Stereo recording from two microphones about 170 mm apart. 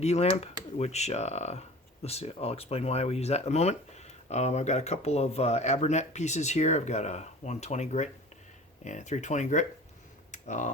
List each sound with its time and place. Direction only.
0.0 s speech: 40° left (ahead or behind)
10.3 s tick-tock: 45° left (ahead or behind)